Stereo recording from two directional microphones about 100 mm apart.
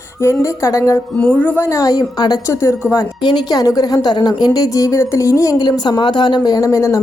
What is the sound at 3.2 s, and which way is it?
A woman's voice, 45° left (ahead or behind).